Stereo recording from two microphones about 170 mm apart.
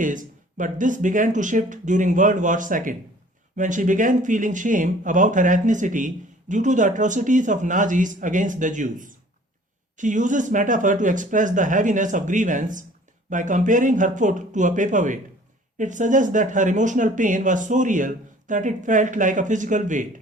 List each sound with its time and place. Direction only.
0.0 s speech: 50° right (ahead or behind)